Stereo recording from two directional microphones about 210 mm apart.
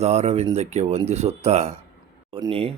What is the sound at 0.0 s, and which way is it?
Speech, 30° right (ahead or behind).